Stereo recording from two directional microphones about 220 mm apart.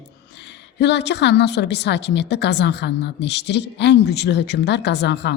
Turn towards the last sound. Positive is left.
turn(degrees=50)  # may be behind; listen again after turning